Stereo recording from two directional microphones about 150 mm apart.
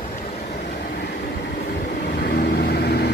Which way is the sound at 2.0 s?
90° left.